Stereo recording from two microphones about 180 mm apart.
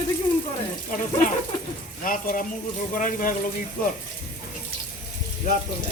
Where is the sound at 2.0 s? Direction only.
50° left (ahead or behind).